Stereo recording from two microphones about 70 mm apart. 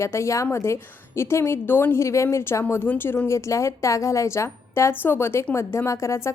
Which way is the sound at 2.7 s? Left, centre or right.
Left.